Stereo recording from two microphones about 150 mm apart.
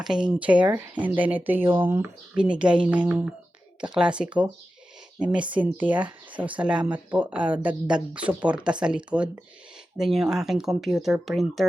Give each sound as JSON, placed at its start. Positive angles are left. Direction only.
{"t": 0.0, "sound": "speech", "side_deg": -5}